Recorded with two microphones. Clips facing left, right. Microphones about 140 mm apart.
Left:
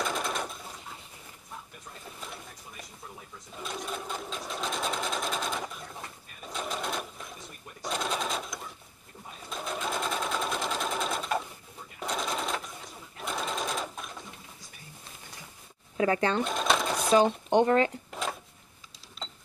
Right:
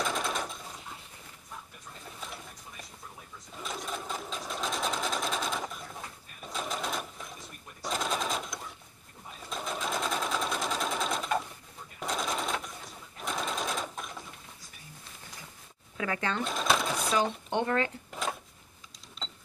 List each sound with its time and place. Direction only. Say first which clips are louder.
0.0 s machine gun: even; centre (ahead or behind)
3.6 s sewing machine: left 1 dB; centre (ahead or behind)
16.0 s speech: left 6 dB; 30° left (ahead or behind)
16.4 s sewing machine: left 1 dB; centre (ahead or behind)
17.2 s speech: left 7 dB; 20° left (ahead or behind)